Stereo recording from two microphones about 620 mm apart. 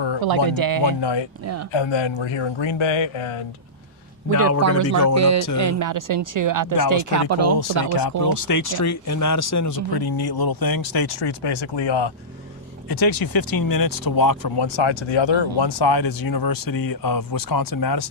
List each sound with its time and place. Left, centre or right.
0.2 s speech: right
0.9 s speech: left
4.3 s speech: right
8.3 s speech: left